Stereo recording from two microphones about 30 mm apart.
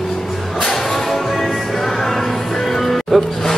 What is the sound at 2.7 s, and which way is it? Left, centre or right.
Music, centre.